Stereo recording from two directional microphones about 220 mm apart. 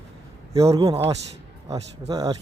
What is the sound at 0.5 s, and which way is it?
A man's voice, 15° right (ahead or behind).